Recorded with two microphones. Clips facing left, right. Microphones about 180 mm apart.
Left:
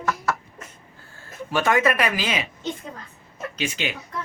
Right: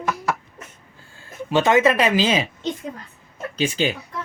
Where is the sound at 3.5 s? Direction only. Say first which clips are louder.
Right 7 dB; 35° right (ahead or behind).